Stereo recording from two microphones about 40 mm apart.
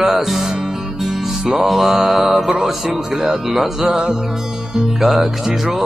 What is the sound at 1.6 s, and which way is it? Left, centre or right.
Music, centre.